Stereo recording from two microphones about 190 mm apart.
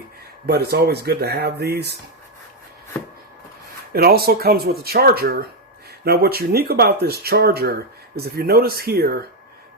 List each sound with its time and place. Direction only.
0.4 s speech: 55° right (ahead or behind)
3.9 s speech: 55° right (ahead or behind)